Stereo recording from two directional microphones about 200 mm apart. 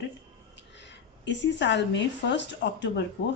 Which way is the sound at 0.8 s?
60° left (ahead or behind).